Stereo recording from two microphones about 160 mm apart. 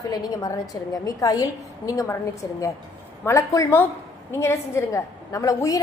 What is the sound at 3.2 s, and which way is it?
A woman's voice, 20° left (ahead or behind).